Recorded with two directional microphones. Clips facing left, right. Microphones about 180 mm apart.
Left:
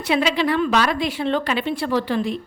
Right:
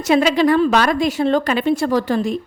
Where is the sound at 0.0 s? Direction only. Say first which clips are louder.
Right 5 dB; 45° right (ahead or behind).